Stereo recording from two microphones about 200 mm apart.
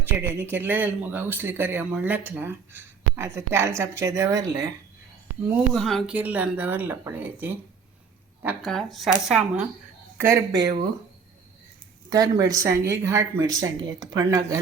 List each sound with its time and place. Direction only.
0.0 s speech: 10° right (ahead or behind)
5.7 s speech: centre (ahead or behind)
8.6 s speech: centre (ahead or behind); by 10.8 s 20° right (ahead or behind)
12.1 s speech: 20° right (ahead or behind)